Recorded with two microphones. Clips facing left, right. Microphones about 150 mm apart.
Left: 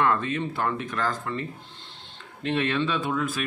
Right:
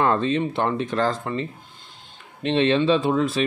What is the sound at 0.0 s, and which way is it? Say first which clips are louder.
Speech: right 4 dB; 30° right (ahead or behind).